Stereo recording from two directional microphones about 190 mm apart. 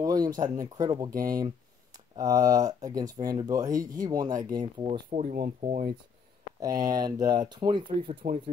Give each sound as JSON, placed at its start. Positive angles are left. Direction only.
{"t": 0.0, "sound": "speech", "side_deg": -20}
{"t": 1.1, "sound": "speech", "side_deg": -50}
{"t": 2.1, "sound": "speech", "side_deg": -20}
{"t": 5.1, "sound": "speech", "side_deg": -40}
{"t": 6.6, "sound": "speech", "side_deg": -20}